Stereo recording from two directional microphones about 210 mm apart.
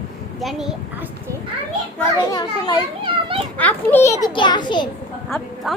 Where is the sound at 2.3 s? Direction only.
20° left (ahead or behind).